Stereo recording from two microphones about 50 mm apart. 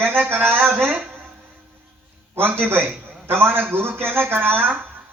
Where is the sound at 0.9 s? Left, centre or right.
Right.